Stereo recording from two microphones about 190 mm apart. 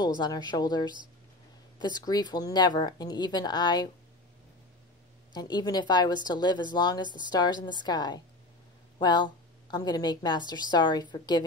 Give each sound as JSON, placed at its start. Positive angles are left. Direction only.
{"t": 0.2, "sound": "a woman's voice", "side_deg": 20}
{"t": 5.3, "sound": "a woman's voice", "side_deg": 20}